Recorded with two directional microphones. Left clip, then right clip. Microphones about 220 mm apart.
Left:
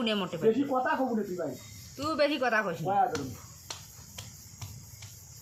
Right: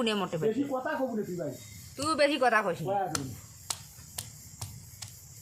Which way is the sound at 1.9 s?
30° right (ahead or behind).